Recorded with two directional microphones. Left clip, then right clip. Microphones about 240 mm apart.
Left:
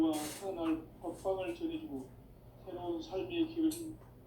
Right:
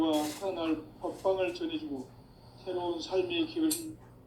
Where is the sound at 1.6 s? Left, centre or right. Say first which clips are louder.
Right 4 dB; right.